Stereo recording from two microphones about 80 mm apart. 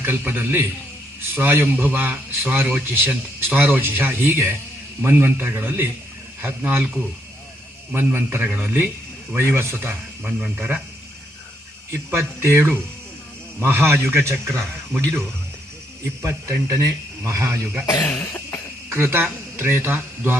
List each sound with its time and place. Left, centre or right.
0.0 s speech: right
7.9 s speech: right
11.9 s a man's voice: right
16.2 s a man's voice: right
18.0 s cough: left
18.9 s speech: right